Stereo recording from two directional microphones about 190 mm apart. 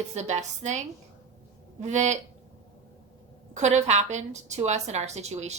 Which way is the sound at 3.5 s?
35° right (ahead or behind).